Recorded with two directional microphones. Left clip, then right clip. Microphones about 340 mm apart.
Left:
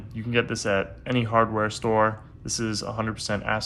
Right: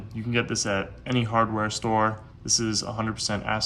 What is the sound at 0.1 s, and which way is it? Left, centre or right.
Speech, centre.